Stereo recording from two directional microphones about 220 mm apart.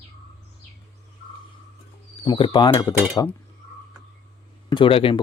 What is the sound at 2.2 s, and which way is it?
Speech, 25° left (ahead or behind).